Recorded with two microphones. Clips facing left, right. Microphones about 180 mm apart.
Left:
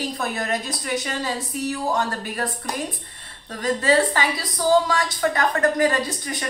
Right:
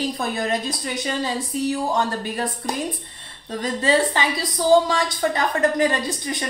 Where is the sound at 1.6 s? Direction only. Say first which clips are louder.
Right 1 dB; 25° right (ahead or behind).